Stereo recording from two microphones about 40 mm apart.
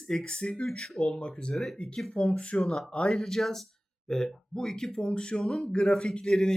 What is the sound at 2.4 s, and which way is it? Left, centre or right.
Speech, left.